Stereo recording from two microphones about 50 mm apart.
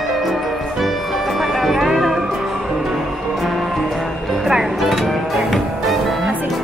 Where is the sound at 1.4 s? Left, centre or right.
Centre.